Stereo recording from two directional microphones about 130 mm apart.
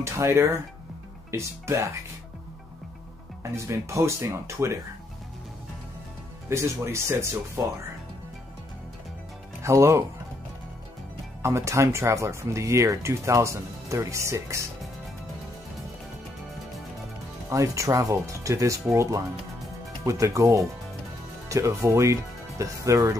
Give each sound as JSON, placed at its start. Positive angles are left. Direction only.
{"t": 0.0, "sound": "speech", "side_deg": -20}
{"t": 3.5, "sound": "speech", "side_deg": -20}
{"t": 6.5, "sound": "speech", "side_deg": -20}
{"t": 9.6, "sound": "speech", "side_deg": -20}
{"t": 11.4, "sound": "speech", "side_deg": -20}
{"t": 17.5, "sound": "speech", "side_deg": -25}